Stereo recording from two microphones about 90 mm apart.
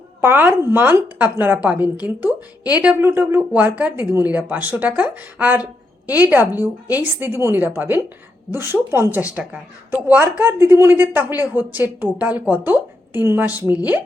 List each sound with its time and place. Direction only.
0.2 s a woman's voice: 25° right (ahead or behind)